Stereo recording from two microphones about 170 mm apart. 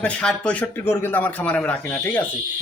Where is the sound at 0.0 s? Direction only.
5° left (ahead or behind).